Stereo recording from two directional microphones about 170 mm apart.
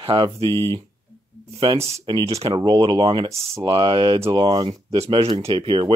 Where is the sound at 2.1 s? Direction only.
35° right (ahead or behind).